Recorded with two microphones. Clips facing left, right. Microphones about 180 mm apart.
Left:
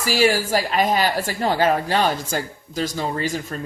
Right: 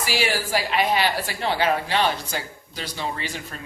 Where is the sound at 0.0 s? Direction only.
45° left (ahead or behind).